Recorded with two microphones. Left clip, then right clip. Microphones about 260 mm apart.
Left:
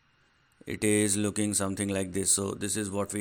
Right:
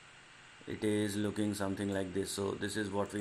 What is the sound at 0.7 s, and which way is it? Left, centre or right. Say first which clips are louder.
Speech: left 7 dB; left.